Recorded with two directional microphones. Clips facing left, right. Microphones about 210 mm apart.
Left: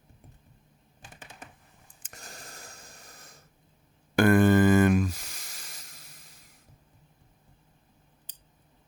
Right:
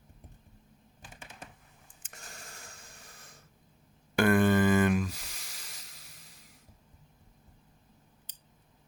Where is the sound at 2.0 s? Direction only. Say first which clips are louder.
Left 3 dB; 40° left (ahead or behind).